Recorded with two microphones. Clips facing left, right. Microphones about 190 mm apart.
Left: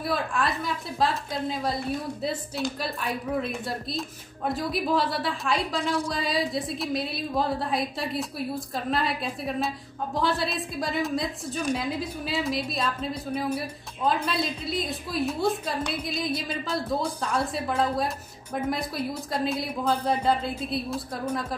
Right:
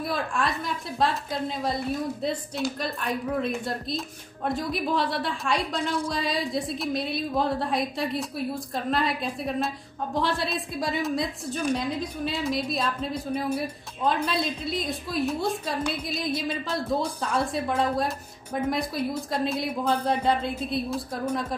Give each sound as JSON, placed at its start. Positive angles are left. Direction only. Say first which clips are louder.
{"t": 0.0, "sound": "a woman's voice", "louder": "even", "side_deg": 0}